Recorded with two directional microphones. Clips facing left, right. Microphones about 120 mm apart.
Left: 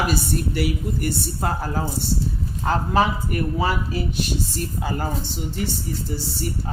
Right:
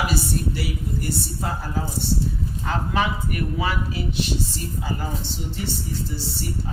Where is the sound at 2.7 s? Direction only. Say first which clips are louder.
Left 4 dB; 35° left (ahead or behind); by 5.0 s 50° left (ahead or behind).